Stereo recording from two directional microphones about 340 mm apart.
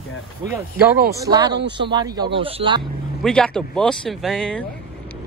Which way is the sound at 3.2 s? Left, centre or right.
Centre.